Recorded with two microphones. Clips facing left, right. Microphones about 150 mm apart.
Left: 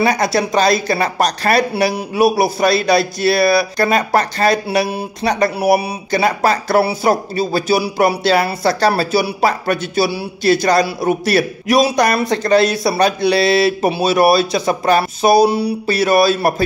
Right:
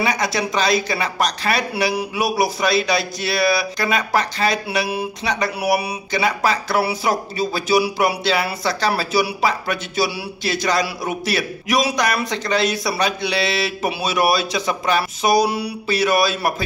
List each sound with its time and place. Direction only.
0.0 s a man's voice: 40° left (ahead or behind)
2.1 s a man's voice: 30° left (ahead or behind)
6.2 s a man's voice: 45° left (ahead or behind)
7.0 s speech: 55° left (ahead or behind)
8.8 s speech: 40° left (ahead or behind)
10.7 s a man's voice: 40° left (ahead or behind)
15.2 s a man's voice: 30° left (ahead or behind)